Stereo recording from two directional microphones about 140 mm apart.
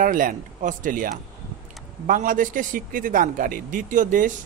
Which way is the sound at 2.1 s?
80° right.